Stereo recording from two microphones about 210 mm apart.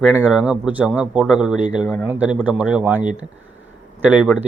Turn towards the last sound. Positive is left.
turn(degrees=-5)  # may be behind; listen again after turning